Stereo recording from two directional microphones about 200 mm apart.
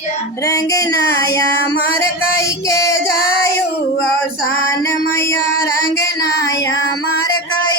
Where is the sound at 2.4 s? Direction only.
15° left (ahead or behind).